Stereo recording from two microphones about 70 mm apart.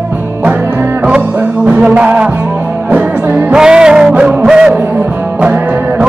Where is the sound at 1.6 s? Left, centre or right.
Centre.